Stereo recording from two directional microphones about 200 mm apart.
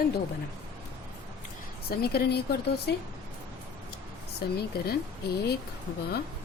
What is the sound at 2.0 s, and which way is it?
Speech, 55° left (ahead or behind).